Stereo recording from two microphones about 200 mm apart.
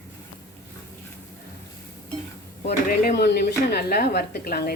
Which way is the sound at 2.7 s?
50° left (ahead or behind).